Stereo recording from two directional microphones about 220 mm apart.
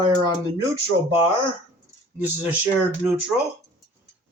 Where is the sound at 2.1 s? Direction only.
10° right (ahead or behind).